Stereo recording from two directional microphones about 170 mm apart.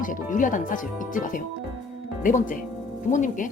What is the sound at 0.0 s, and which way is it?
Speech, 50° left (ahead or behind).